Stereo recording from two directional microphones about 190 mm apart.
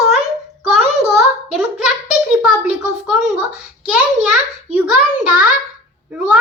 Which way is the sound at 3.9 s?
5° right (ahead or behind).